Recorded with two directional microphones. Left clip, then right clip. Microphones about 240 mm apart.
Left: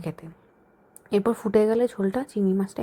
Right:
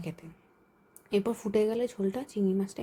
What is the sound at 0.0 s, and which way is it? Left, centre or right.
Speech, centre.